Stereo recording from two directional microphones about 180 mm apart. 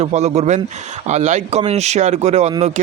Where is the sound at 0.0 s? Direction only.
40° right (ahead or behind).